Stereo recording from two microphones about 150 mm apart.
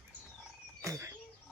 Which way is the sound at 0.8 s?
20° right (ahead or behind).